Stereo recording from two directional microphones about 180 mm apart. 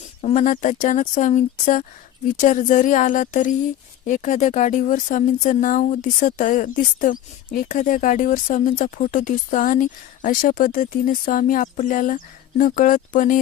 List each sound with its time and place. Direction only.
0.2 s speech: 40° left (ahead or behind)